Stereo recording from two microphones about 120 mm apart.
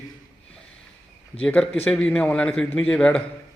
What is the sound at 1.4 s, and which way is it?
A man's voice, 5° left (ahead or behind).